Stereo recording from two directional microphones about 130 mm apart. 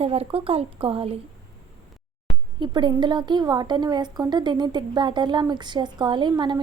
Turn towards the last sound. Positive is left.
turn(degrees=-35)  # may be behind; listen again after turning